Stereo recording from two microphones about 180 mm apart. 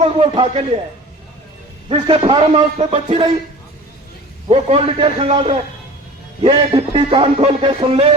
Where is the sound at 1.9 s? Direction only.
30° right (ahead or behind).